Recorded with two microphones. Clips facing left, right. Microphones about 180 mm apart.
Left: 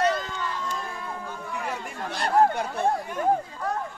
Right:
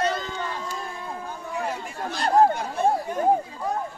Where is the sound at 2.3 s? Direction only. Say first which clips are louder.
Right 2 dB; 35° right (ahead or behind).